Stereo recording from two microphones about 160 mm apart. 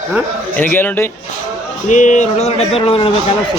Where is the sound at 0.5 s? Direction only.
10° left (ahead or behind).